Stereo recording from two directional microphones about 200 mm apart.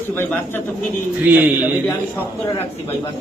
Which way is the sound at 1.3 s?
10° right (ahead or behind).